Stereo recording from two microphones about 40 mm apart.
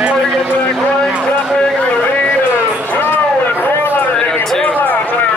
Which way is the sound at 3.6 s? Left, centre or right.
Left.